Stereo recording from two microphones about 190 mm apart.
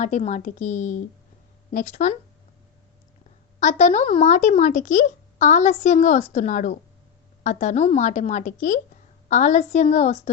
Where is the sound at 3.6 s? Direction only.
40° left (ahead or behind).